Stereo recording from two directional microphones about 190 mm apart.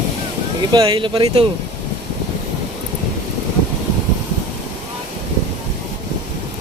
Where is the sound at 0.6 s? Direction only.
20° right (ahead or behind).